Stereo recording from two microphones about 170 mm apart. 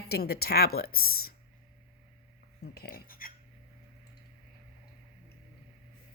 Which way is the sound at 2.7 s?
60° left (ahead or behind).